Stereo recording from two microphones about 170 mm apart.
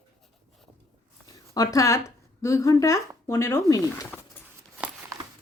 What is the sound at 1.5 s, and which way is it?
Speech, 20° left (ahead or behind).